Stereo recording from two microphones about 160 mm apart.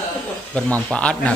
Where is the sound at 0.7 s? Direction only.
10° left (ahead or behind).